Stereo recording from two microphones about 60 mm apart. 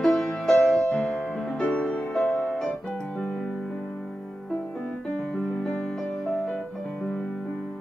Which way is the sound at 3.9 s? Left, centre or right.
Centre.